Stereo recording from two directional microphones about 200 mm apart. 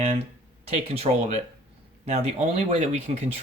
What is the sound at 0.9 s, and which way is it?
Speech, 30° right (ahead or behind).